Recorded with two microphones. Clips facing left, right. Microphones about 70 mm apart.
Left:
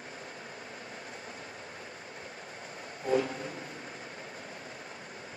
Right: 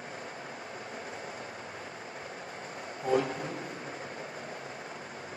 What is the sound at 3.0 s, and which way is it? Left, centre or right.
Vehicle, right.